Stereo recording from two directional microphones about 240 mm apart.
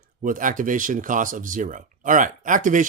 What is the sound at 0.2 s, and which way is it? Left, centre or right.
Speech, right.